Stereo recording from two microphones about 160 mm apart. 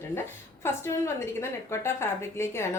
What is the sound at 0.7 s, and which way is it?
A woman's voice, 15° left (ahead or behind).